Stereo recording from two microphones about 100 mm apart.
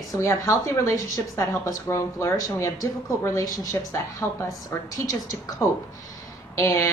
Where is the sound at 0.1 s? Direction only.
30° left (ahead or behind).